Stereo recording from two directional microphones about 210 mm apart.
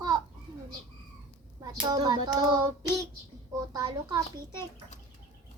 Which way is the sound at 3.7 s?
20° right (ahead or behind).